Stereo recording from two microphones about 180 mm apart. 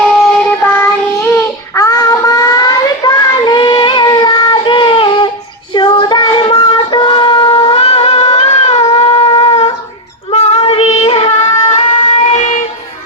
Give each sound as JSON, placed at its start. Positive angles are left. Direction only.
{"t": 0.6, "sound": "child singing", "side_deg": 15}
{"t": 10.3, "sound": "music", "side_deg": 35}